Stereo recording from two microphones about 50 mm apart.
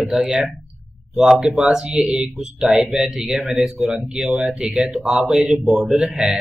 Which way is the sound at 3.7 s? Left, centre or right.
Right.